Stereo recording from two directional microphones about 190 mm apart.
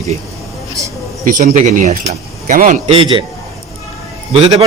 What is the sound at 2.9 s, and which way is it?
Speech, 30° right (ahead or behind).